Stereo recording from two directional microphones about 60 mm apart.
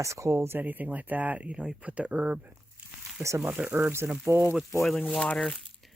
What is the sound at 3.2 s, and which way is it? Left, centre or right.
Speech, right.